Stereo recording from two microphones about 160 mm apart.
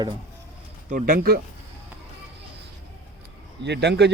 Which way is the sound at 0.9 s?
50° right (ahead or behind).